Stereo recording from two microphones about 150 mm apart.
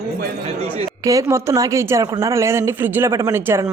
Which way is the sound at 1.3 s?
20° right (ahead or behind).